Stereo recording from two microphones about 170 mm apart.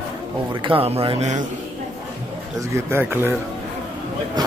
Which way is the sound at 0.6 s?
35° right (ahead or behind).